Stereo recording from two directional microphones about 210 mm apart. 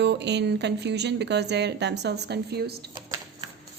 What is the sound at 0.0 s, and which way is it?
Speech, 55° right (ahead or behind).